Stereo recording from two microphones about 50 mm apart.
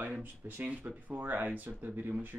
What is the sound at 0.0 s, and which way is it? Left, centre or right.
Speech, right.